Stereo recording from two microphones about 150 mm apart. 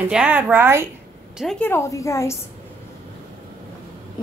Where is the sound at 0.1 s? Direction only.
10° right (ahead or behind).